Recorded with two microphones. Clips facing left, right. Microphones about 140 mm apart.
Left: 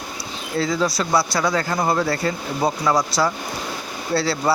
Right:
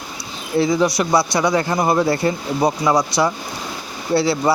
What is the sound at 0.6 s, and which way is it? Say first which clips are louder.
Speech: right 4 dB; 20° right (ahead or behind).